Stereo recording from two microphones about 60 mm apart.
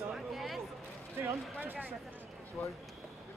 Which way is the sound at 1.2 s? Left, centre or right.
Right.